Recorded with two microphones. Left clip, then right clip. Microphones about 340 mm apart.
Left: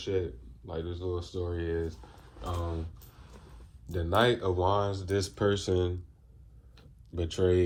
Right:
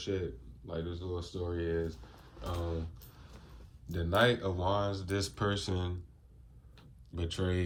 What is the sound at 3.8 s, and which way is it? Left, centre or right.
Speech, centre.